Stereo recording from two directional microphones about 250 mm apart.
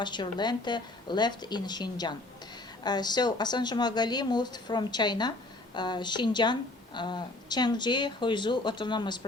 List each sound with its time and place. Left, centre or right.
0.0 s a woman's voice: centre